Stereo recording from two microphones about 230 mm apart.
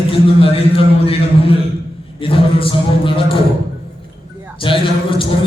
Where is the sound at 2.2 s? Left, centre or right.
Left.